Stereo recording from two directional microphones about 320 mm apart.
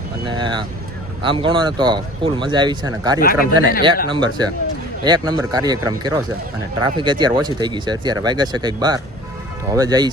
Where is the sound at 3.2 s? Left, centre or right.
Left.